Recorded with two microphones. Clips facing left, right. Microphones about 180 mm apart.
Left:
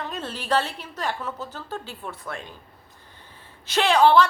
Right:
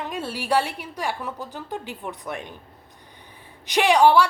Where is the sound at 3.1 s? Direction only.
15° right (ahead or behind).